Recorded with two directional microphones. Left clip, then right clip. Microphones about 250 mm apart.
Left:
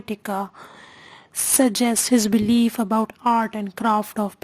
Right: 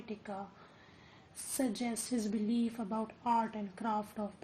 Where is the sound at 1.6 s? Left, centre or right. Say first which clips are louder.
Left 17 dB; left.